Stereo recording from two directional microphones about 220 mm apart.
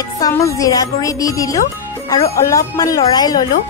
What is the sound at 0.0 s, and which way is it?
Speech, 15° left (ahead or behind).